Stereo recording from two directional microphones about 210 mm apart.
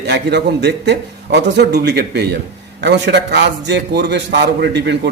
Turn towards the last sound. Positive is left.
turn(degrees=-55)  # may be behind; listen again after turning